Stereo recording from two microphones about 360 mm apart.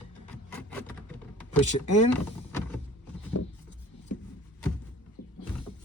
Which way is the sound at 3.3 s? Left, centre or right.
Left.